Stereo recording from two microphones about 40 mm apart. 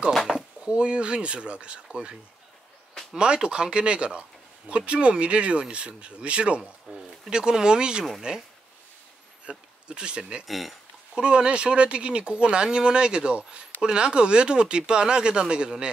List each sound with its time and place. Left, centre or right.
0.3 s a sound: centre
0.7 s speech: right
2.9 s a sound: centre
3.4 s speech: right
6.9 s a sound: centre
7.3 s speech: centre
9.5 s speech: right
10.4 s speech: centre
11.1 s speech: right